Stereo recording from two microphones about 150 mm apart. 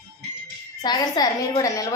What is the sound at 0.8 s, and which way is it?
A woman's voice, 25° left (ahead or behind).